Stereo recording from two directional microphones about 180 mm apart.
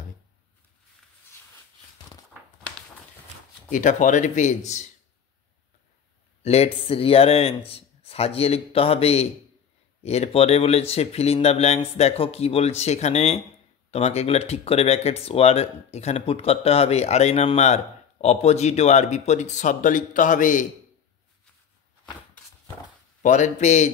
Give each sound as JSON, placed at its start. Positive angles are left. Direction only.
{"t": 3.7, "sound": "speech", "side_deg": 45}
{"t": 6.4, "sound": "speech", "side_deg": 35}
{"t": 23.2, "sound": "speech", "side_deg": 45}